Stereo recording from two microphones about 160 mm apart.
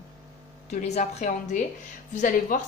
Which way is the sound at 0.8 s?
45° left (ahead or behind).